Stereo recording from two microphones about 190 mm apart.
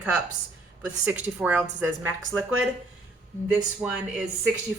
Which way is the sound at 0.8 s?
5° right (ahead or behind).